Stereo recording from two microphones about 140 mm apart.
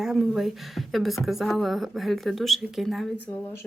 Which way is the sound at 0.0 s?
5° right (ahead or behind).